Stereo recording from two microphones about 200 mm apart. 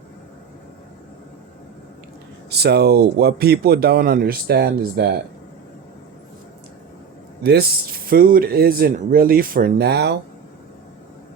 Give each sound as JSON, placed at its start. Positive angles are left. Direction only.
{"t": 2.5, "sound": "speech", "side_deg": -55}
{"t": 7.4, "sound": "speech", "side_deg": -50}